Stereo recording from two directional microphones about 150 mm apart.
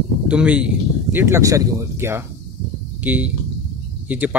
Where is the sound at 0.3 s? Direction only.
5° right (ahead or behind).